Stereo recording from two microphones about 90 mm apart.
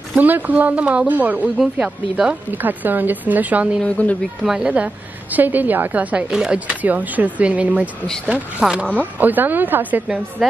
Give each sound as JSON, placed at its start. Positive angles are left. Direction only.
{"t": 0.1, "sound": "a woman's voice", "side_deg": -20}
{"t": 2.5, "sound": "speech", "side_deg": -20}
{"t": 3.8, "sound": "speech", "side_deg": 15}
{"t": 4.5, "sound": "a woman's voice", "side_deg": -10}
{"t": 10.4, "sound": "a woman's voice", "side_deg": 0}